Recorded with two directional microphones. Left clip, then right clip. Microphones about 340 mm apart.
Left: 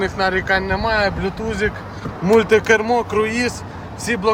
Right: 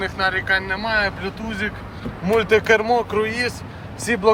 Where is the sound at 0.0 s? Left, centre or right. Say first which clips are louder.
Left 2 dB; centre.